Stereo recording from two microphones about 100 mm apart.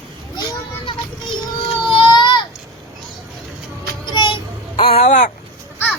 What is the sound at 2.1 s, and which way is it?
Baby cry, 50° left (ahead or behind).